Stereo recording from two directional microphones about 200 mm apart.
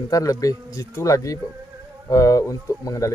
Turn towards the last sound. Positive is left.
turn(degrees=15)  # may be behind; listen again after turning